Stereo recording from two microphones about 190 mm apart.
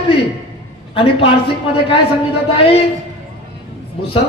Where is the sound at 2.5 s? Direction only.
30° left (ahead or behind).